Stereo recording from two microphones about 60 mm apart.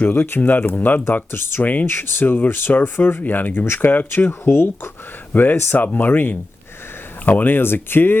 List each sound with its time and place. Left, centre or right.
0.0 s speech: left
1.9 s speech: left